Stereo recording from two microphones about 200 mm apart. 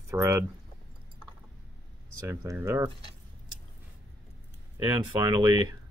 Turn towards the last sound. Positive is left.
turn(degrees=-20)  # may be behind; listen again after turning